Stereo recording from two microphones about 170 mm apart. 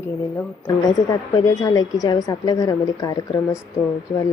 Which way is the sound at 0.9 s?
20° left (ahead or behind).